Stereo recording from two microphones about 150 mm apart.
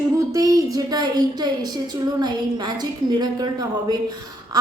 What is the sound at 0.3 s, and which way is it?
Speech, 25° right (ahead or behind).